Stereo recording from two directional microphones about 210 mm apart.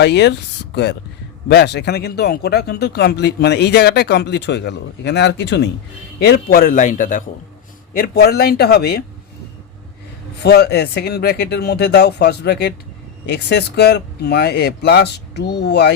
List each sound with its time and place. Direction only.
0.0 s speech: 55° left (ahead or behind)
10.4 s speech: 50° left (ahead or behind)